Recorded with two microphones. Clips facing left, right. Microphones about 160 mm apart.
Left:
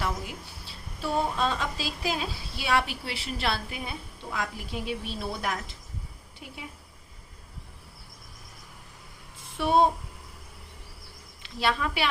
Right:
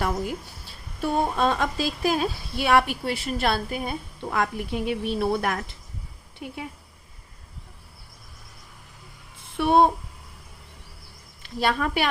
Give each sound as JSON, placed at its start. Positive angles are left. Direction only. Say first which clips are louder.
{"t": 0.0, "sound": "a woman's voice", "louder": "right 6 dB", "side_deg": -50}
{"t": 9.6, "sound": "speech", "louder": "right 4 dB", "side_deg": -60}
{"t": 11.4, "sound": "a woman's voice", "louder": "right 3 dB", "side_deg": -50}